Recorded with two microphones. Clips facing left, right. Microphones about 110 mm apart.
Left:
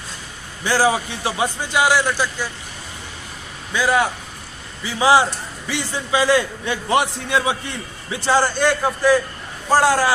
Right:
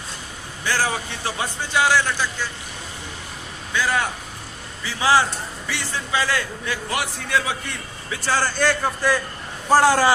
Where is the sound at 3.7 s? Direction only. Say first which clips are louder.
Left 4 dB; 15° left (ahead or behind).